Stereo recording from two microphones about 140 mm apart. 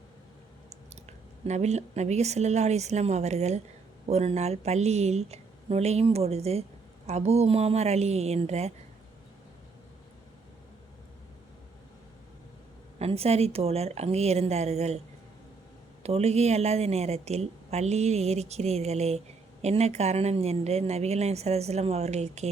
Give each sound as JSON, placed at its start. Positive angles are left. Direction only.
{"t": 1.0, "sound": "a woman's voice", "side_deg": -55}
{"t": 13.0, "sound": "a woman's voice", "side_deg": -45}
{"t": 16.0, "sound": "a woman's voice", "side_deg": -50}